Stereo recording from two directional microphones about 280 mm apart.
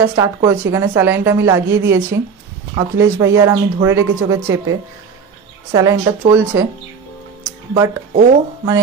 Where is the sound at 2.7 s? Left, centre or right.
Centre.